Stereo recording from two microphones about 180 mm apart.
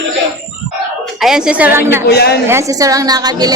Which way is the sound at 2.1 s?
65° left (ahead or behind).